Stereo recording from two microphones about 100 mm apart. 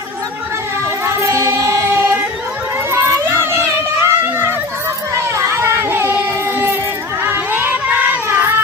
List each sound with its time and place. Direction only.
1.0 s music: 30° right (ahead or behind)
2.9 s crowd: 25° right (ahead or behind)
4.0 s a sound: 25° right (ahead or behind)
7.3 s music: 20° right (ahead or behind)